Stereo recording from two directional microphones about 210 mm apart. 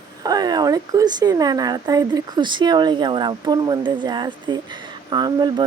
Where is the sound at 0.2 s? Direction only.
20° right (ahead or behind).